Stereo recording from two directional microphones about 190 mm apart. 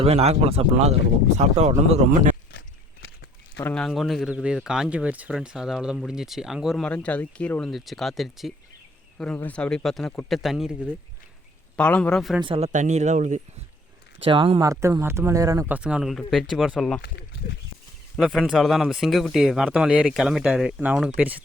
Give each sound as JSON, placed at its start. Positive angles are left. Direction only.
{"t": 0.0, "sound": "speech", "side_deg": -30}
{"t": 2.5, "sound": "a sound", "side_deg": 70}
{"t": 3.6, "sound": "speech", "side_deg": 5}
{"t": 12.4, "sound": "speech", "side_deg": -30}
{"t": 14.3, "sound": "speech", "side_deg": -25}
{"t": 14.7, "sound": "speech", "side_deg": -15}
{"t": 15.8, "sound": "speech", "side_deg": -5}
{"t": 17.0, "sound": "speech", "side_deg": 65}
{"t": 18.2, "sound": "speech", "side_deg": 0}